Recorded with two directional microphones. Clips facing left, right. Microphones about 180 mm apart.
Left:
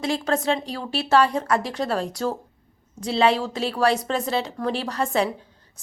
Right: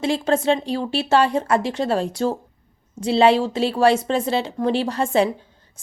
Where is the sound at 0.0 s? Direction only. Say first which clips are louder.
Right 4 dB; 30° right (ahead or behind).